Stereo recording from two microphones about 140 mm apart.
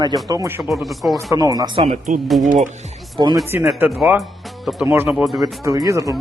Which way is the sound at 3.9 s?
5° right (ahead or behind).